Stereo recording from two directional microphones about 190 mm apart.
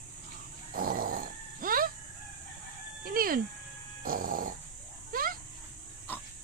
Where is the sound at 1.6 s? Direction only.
50° right (ahead or behind).